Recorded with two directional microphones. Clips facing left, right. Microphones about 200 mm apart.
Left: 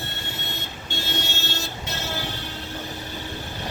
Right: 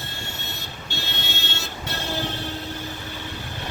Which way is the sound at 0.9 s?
40° left (ahead or behind).